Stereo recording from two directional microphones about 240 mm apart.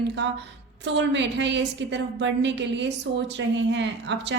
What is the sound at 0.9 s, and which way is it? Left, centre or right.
A woman's voice, right.